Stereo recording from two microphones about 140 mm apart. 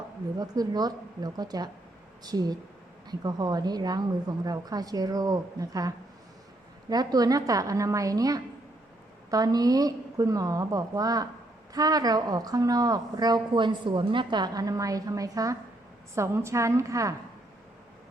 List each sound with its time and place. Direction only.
0.3 s speech: 30° right (ahead or behind)
6.9 s speech: 25° right (ahead or behind)